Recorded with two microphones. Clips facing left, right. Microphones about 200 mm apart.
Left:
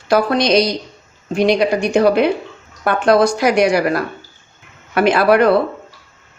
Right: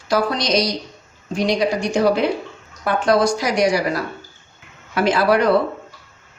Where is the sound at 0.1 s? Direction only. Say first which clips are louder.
Left 5 dB; 60° left (ahead or behind).